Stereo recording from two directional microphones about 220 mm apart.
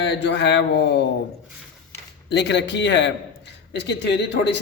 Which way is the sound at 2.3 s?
50° left (ahead or behind).